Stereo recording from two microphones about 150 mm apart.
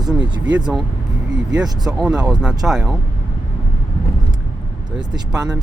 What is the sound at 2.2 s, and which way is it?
Speech, 30° right (ahead or behind).